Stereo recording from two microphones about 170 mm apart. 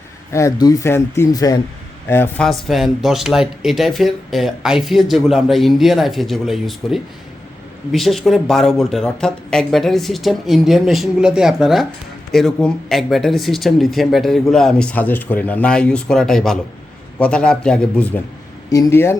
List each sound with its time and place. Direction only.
0.3 s speech: 20° left (ahead or behind)
2.5 s speech: centre (ahead or behind)